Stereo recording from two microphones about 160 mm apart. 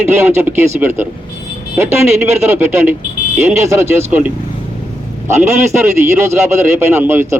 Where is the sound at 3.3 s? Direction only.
15° right (ahead or behind).